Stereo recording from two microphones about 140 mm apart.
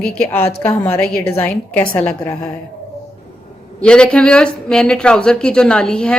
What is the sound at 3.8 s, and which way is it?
A woman's voice, 5° left (ahead or behind).